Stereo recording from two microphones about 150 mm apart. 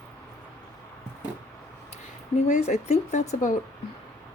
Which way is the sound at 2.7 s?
50° left (ahead or behind).